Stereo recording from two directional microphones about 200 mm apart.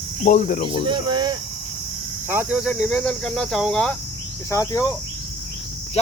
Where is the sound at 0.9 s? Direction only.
20° right (ahead or behind).